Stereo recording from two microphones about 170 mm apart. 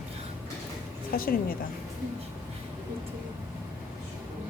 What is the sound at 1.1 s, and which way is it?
Speech, 60° left (ahead or behind).